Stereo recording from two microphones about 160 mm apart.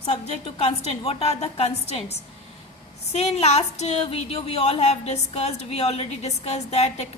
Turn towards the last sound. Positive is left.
turn(degrees=45)  # may be behind; listen again after turning